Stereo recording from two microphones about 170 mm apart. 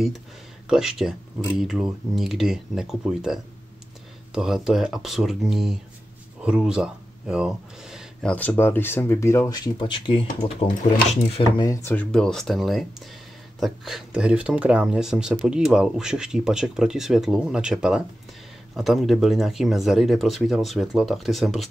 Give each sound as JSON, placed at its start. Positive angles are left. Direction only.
{"t": 0.7, "sound": "speech", "side_deg": 0}
{"t": 8.3, "sound": "speech", "side_deg": 10}
{"t": 10.2, "sound": "speech", "side_deg": 50}
{"t": 11.3, "sound": "speech", "side_deg": 25}